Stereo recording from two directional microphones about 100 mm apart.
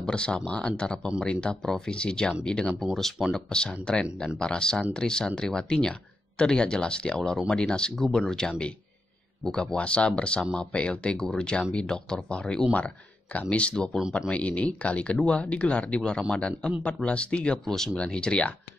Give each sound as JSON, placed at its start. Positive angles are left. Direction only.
{"t": 0.0, "sound": "speech", "side_deg": 10}